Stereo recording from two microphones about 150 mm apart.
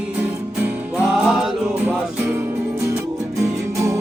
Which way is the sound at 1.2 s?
10° right (ahead or behind).